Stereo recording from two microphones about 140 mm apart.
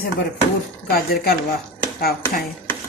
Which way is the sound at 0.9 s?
90° left.